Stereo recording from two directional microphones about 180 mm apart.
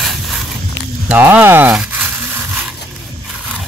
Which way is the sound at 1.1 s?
10° right (ahead or behind).